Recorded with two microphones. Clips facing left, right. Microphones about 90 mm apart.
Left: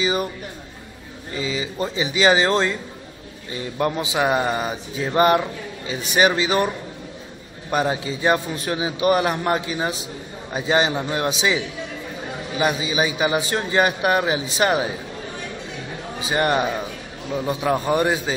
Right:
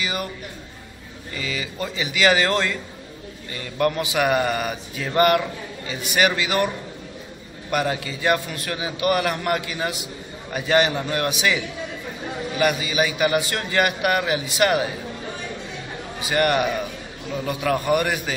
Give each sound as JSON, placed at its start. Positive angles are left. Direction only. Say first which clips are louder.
{"t": 0.0, "sound": "speech", "louder": "left 5 dB", "side_deg": 25}
{"t": 1.3, "sound": "speech", "louder": "left 4 dB", "side_deg": 20}
{"t": 7.7, "sound": "speech", "louder": "left 2 dB", "side_deg": 25}
{"t": 16.2, "sound": "speech", "louder": "even", "side_deg": 25}